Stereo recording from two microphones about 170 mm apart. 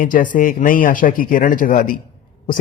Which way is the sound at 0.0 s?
50° left (ahead or behind).